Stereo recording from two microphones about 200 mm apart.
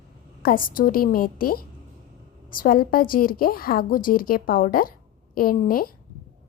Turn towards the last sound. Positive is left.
turn(degrees=45)  # may be behind; listen again after turning